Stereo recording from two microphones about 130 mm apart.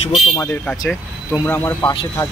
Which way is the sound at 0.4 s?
15° left (ahead or behind).